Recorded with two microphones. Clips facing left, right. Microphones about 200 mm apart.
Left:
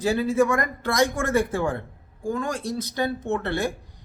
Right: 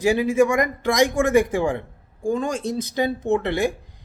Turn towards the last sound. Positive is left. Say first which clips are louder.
# right 5 dB
turn(degrees=-15)  # may be behind; listen again after turning